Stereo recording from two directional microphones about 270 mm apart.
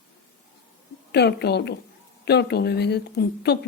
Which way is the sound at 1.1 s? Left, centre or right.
Left.